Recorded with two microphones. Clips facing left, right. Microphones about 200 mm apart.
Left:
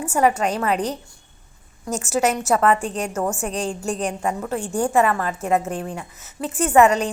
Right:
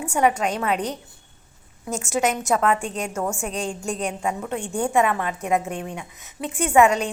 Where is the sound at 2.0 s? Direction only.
5° left (ahead or behind).